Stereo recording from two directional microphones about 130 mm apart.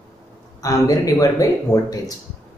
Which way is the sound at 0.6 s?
25° left (ahead or behind).